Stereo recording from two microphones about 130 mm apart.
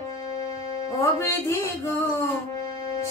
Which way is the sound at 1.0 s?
20° left (ahead or behind).